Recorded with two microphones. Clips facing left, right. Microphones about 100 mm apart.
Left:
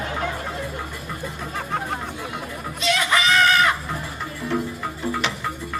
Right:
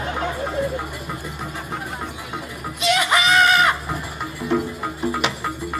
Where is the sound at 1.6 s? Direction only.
55° left (ahead or behind).